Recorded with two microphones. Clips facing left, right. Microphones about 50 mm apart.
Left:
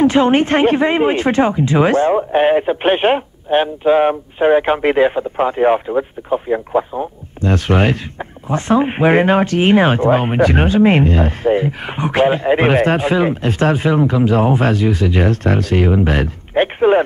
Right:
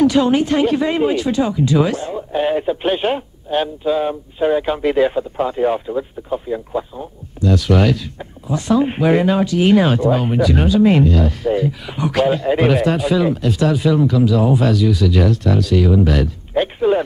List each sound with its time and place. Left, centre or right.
0.0 s speech: left